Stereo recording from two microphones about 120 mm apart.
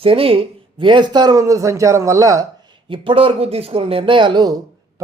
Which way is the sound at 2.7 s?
45° right (ahead or behind).